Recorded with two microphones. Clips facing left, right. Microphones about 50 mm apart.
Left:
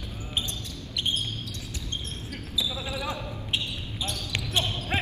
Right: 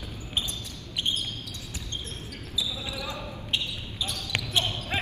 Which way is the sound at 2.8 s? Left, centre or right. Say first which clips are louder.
Left 2 dB; left.